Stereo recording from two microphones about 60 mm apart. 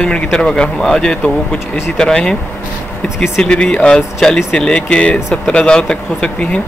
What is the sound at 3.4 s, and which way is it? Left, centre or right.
Speech, centre.